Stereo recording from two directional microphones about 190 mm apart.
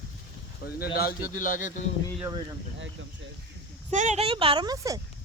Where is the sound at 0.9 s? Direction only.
50° left (ahead or behind).